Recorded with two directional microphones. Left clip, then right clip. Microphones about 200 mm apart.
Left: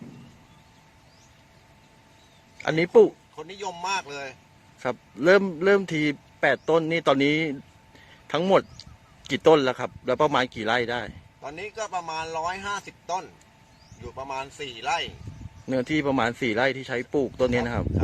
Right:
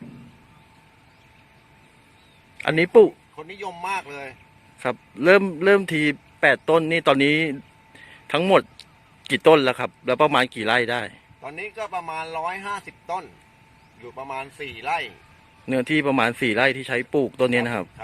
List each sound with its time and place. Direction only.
2.6 s a man's voice: 5° right (ahead or behind)